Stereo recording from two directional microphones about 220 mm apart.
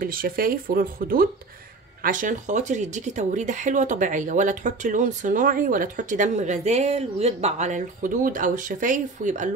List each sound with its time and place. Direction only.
0.0 s speech: 40° right (ahead or behind)